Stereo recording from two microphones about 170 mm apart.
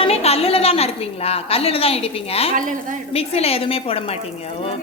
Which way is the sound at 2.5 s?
50° right (ahead or behind).